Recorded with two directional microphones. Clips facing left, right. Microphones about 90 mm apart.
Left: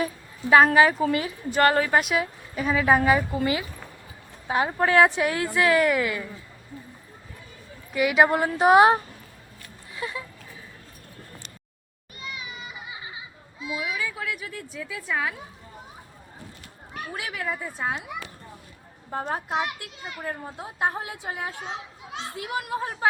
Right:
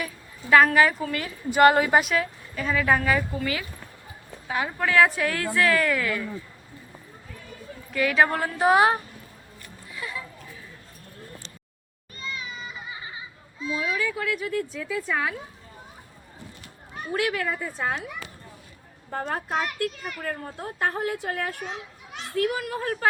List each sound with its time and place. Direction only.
0.5 s a woman's voice: 25° left (ahead or behind)
1.5 s a woman's voice: 15° right (ahead or behind)
2.1 s a woman's voice: 15° left (ahead or behind)
7.9 s a woman's voice: 15° left (ahead or behind)
9.9 s a sound: 25° left (ahead or behind)
12.1 s children playing: 15° left (ahead or behind)
17.0 s speech: 5° left (ahead or behind)
19.3 s speech: 15° left (ahead or behind)